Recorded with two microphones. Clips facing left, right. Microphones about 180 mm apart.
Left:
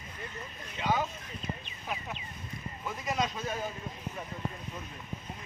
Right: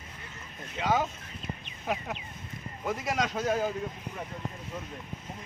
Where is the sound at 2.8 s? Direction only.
90° right.